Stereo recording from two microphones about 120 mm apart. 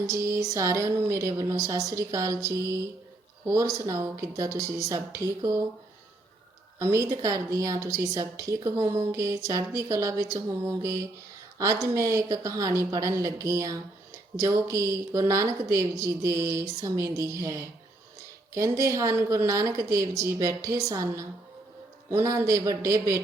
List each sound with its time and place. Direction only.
0.1 s a woman's voice: 25° right (ahead or behind)
6.7 s a woman's voice: 25° right (ahead or behind)
18.8 s a woman's voice: 25° right (ahead or behind)